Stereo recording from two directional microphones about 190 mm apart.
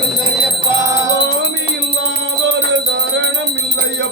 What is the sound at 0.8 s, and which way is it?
Music, 15° right (ahead or behind).